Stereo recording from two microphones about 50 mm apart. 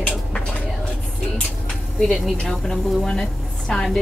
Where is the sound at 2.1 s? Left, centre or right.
Centre.